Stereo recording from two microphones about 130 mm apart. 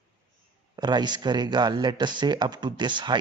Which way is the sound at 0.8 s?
35° right (ahead or behind).